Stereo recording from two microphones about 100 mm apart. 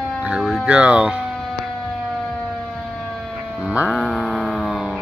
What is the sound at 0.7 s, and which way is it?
Speech, 10° right (ahead or behind).